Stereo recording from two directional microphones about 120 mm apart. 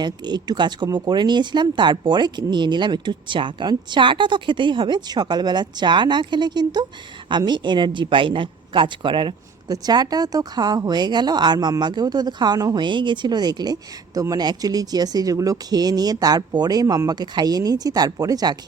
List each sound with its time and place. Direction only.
0.0 s speech: 35° right (ahead or behind)